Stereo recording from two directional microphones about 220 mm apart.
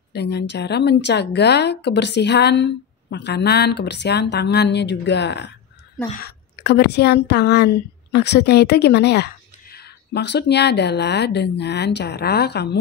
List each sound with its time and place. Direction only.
0.1 s a woman's voice: 50° left (ahead or behind)
6.0 s a woman's voice: 40° left (ahead or behind)